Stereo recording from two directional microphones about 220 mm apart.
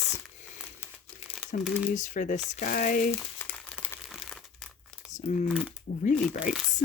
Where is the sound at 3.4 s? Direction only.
10° left (ahead or behind).